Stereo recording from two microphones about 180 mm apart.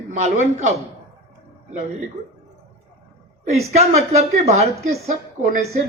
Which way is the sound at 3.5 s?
35° right (ahead or behind).